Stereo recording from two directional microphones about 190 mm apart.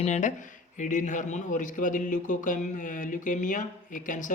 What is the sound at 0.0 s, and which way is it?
A man's voice, 40° left (ahead or behind).